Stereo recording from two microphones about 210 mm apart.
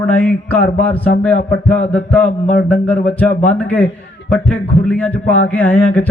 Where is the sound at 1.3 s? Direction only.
40° left (ahead or behind).